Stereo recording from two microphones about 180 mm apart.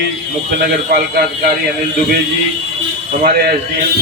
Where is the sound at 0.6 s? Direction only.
60° right (ahead or behind).